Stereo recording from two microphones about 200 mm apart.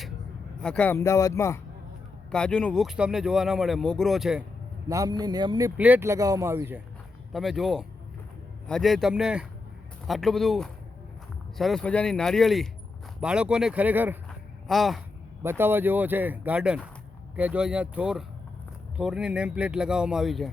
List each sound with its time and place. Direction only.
0.6 s speech: 5° left (ahead or behind)
4.9 s speech: 15° right (ahead or behind)
7.3 s speech: centre (ahead or behind)
15.4 s speech: 10° right (ahead or behind)